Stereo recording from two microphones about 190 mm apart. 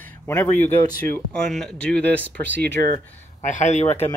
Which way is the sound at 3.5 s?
40° left (ahead or behind).